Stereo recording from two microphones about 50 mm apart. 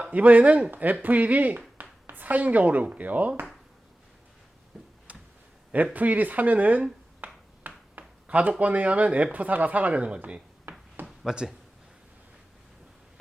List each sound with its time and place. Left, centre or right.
0.1 s speech: right
4.7 s tick-tock: centre
5.7 s speech: right
7.2 s a sound: right
7.9 s speech: right
11.0 s a sound: centre